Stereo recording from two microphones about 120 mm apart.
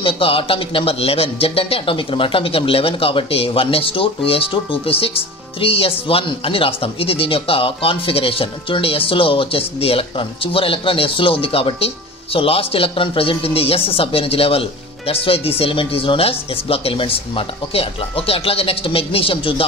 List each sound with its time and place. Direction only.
0.0 s a man's voice: 50° left (ahead or behind)